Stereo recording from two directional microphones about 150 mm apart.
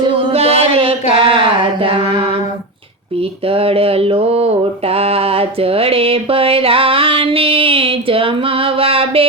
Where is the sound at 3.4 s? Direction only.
40° right (ahead or behind).